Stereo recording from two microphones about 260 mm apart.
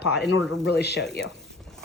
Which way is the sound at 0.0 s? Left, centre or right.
Left.